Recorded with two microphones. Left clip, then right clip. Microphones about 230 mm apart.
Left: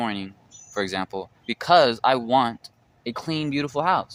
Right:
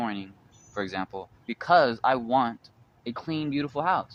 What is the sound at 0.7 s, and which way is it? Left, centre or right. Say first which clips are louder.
Speech: left 5 dB; left.